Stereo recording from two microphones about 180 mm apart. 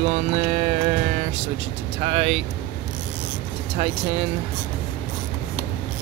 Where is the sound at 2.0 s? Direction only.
35° right (ahead or behind).